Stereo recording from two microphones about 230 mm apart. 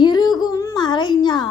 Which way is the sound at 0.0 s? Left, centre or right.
Centre.